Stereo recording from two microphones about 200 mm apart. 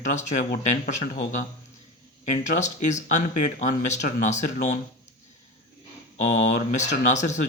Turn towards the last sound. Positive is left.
turn(degrees=35)  # may be behind; listen again after turning